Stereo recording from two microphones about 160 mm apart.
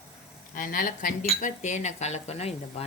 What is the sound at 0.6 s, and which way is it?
Speech, 60° left (ahead or behind).